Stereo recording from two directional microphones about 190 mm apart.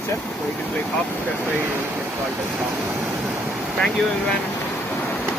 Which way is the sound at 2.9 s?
10° right (ahead or behind).